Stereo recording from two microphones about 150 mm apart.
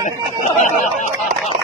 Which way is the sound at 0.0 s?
55° left (ahead or behind).